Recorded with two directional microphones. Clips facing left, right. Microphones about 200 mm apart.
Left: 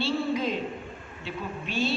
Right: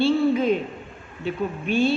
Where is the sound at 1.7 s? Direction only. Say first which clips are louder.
Right 8 dB; 55° right (ahead or behind).